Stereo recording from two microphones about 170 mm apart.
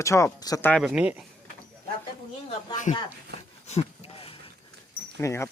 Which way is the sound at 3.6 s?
40° left (ahead or behind).